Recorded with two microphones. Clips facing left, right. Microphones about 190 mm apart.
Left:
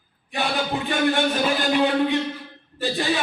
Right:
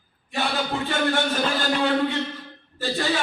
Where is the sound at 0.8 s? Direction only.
15° left (ahead or behind).